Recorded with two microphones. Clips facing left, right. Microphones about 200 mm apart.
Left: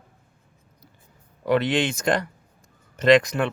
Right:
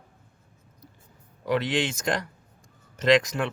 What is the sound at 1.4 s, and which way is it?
Speech, 60° left (ahead or behind).